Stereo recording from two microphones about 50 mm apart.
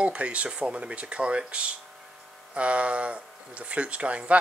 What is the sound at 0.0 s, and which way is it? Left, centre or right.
Speech, right.